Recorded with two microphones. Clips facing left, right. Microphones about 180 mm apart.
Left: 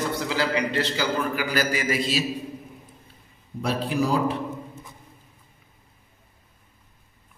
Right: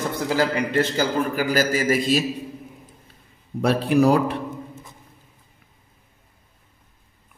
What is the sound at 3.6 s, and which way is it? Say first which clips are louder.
Speech: right 7 dB; 65° right (ahead or behind).